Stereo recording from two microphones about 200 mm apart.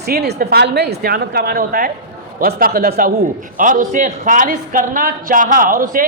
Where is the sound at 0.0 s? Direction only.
55° right (ahead or behind).